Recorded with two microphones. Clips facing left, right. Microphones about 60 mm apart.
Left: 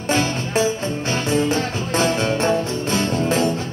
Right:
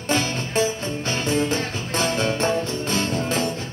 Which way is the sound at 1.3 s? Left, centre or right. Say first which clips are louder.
Left 3 dB; left.